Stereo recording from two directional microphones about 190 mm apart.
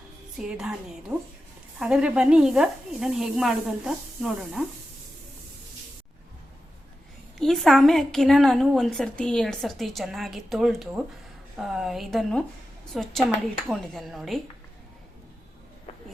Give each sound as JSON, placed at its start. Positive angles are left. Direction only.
{"t": 0.3, "sound": "a woman's voice", "side_deg": -5}
{"t": 1.8, "sound": "a woman's voice", "side_deg": -5}
{"t": 7.3, "sound": "a woman's voice", "side_deg": 0}